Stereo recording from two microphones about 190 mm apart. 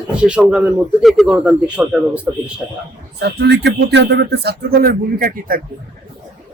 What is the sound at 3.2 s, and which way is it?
Speech, 65° right (ahead or behind).